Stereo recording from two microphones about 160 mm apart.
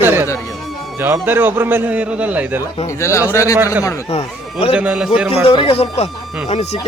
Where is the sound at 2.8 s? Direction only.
20° left (ahead or behind).